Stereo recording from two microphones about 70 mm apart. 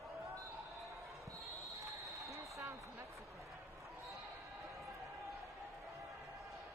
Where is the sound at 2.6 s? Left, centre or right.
Right.